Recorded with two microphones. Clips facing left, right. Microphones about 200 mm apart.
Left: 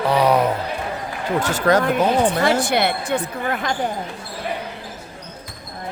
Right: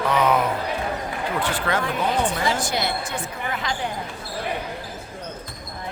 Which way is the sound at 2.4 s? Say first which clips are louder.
Left 6 dB; 65° left (ahead or behind).